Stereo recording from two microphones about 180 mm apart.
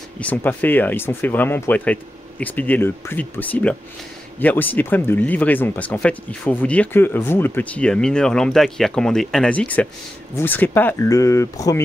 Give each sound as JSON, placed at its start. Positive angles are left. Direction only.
{"t": 0.2, "sound": "speech", "side_deg": 10}